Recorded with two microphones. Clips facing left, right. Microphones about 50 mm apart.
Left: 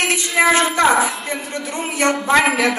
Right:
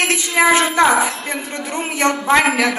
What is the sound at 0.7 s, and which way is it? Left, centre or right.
A woman's voice, right.